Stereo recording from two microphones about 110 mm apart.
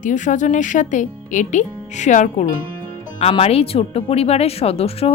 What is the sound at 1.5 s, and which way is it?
Speech, 90° left.